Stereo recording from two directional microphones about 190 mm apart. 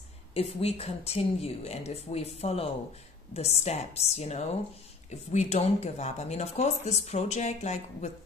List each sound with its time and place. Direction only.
0.3 s speech: 30° left (ahead or behind)